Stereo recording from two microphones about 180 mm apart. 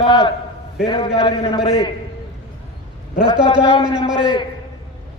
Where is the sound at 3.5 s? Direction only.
30° left (ahead or behind).